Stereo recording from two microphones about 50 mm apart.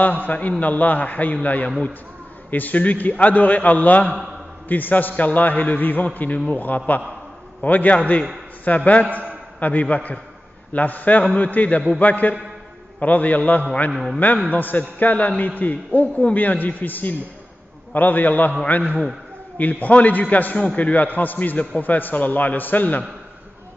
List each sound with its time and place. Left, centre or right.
0.0 s a man's voice: left